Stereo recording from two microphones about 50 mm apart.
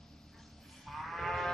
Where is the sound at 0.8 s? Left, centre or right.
Centre.